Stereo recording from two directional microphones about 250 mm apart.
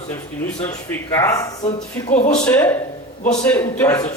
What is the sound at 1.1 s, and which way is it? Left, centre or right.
A man's voice, centre.